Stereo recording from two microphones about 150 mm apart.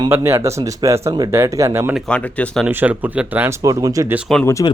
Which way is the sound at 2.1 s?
10° left (ahead or behind).